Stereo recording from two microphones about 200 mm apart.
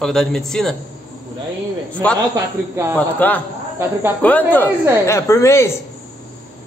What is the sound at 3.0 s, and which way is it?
A woman's voice, 10° left (ahead or behind).